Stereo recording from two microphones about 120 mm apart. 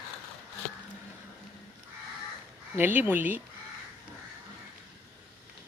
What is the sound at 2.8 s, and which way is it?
Speech, 15° right (ahead or behind).